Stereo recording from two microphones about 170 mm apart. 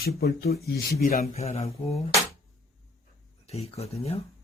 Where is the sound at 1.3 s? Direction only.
40° left (ahead or behind).